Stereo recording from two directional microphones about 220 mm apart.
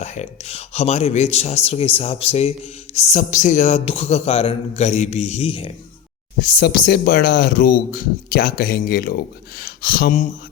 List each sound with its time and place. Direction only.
0.0 s speech: 30° left (ahead or behind)
6.6 s speech: 45° left (ahead or behind)